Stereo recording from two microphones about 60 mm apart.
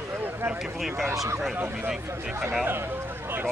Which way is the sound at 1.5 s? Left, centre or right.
Right.